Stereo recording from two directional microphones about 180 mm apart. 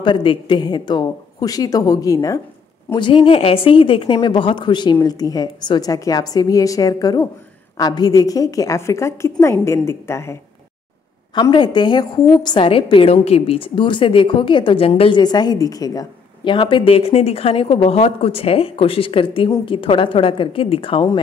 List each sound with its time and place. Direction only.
0.0 s a woman's voice: 25° left (ahead or behind)
11.3 s a woman's voice: 25° left (ahead or behind)